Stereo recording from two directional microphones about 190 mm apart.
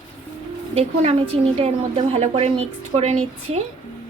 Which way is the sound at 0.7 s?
35° right (ahead or behind).